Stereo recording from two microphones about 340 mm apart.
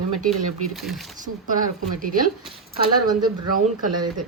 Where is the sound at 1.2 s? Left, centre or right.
Right.